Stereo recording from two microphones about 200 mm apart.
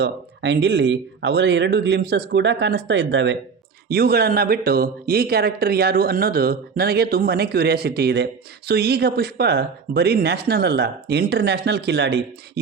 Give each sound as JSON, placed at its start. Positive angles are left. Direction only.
{"t": 0.0, "sound": "speech", "side_deg": -60}
{"t": 3.8, "sound": "speech", "side_deg": -50}